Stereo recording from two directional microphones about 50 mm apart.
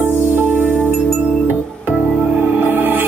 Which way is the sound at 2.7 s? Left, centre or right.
Right.